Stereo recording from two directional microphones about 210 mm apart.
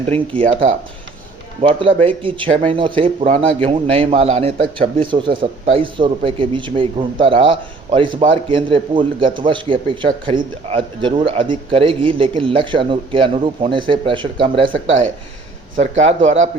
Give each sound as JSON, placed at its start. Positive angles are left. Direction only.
{"t": 0.1, "sound": "speech", "side_deg": -25}
{"t": 1.6, "sound": "speech", "side_deg": -25}
{"t": 15.8, "sound": "speech", "side_deg": -35}